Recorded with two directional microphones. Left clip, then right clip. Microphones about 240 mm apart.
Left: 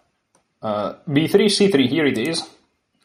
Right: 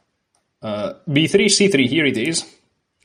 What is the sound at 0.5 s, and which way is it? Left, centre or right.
Speech, right.